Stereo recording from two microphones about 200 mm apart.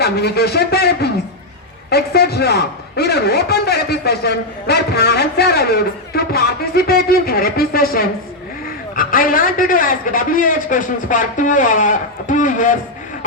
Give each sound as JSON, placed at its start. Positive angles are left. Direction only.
{"t": 0.0, "sound": "a man's voice", "side_deg": 55}